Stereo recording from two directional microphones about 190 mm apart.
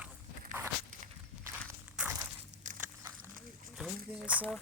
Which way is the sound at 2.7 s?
40° right (ahead or behind).